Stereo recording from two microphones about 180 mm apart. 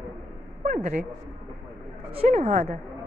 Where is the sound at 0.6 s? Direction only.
40° right (ahead or behind).